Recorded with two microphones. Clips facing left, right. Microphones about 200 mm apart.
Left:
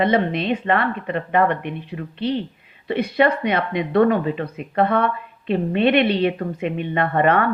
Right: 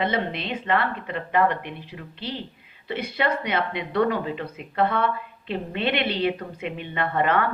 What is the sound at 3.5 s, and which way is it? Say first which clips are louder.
A woman's voice: left 5 dB; 55° left (ahead or behind).